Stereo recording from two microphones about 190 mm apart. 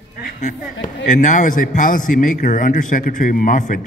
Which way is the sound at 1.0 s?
40° left (ahead or behind).